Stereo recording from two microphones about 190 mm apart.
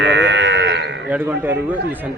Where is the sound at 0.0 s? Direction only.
70° right (ahead or behind).